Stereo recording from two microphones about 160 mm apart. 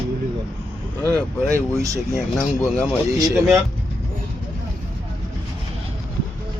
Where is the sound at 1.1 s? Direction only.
20° right (ahead or behind).